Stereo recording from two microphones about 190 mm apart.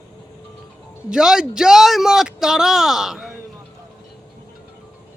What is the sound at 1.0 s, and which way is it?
A man's voice, 5° right (ahead or behind).